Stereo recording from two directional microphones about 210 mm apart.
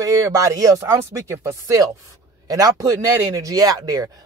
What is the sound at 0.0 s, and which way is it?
A man's voice, 15° right (ahead or behind).